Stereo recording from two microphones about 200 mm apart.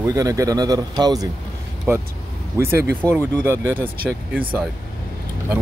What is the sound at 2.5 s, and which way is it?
Speech, 15° right (ahead or behind).